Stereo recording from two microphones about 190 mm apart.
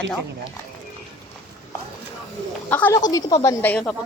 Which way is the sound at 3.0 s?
20° left (ahead or behind).